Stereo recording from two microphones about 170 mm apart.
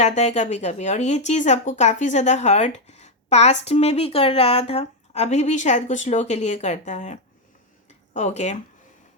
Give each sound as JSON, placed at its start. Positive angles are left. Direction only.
{"t": 0.0, "sound": "speech", "side_deg": 40}